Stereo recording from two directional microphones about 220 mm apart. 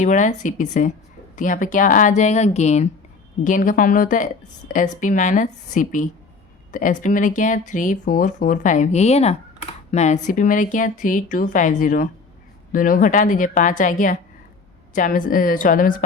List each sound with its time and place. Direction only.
0.0 s speech: 35° left (ahead or behind)